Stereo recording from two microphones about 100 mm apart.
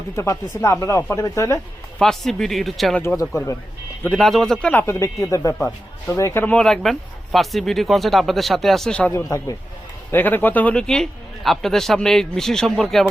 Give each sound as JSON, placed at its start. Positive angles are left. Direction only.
{"t": 0.2, "sound": "speech", "side_deg": 30}
{"t": 2.0, "sound": "a man's voice", "side_deg": 5}
{"t": 4.2, "sound": "a man's voice", "side_deg": 5}
{"t": 4.7, "sound": "speech", "side_deg": 20}
{"t": 4.9, "sound": "speech", "side_deg": 30}
{"t": 5.5, "sound": "speech", "side_deg": 15}
{"t": 6.1, "sound": "speech", "side_deg": 30}
{"t": 6.4, "sound": "a man's voice", "side_deg": 10}
{"t": 9.1, "sound": "speech", "side_deg": 30}
{"t": 10.1, "sound": "a man's voice", "side_deg": 20}